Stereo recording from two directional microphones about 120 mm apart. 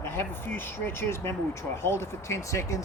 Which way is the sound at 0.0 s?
20° left (ahead or behind).